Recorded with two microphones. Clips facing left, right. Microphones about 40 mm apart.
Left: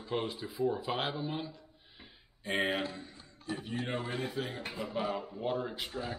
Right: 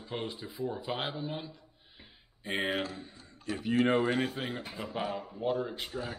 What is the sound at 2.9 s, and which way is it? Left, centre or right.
Speech, centre.